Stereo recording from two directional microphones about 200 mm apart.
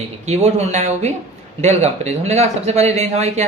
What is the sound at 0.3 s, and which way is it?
A man's voice, 35° right (ahead or behind).